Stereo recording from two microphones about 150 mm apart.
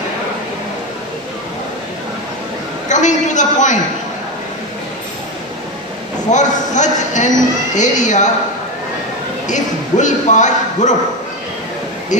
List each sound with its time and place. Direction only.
2.9 s a man's voice: 55° left (ahead or behind)
6.3 s a man's voice: 55° left (ahead or behind)
9.5 s a man's voice: 55° left (ahead or behind)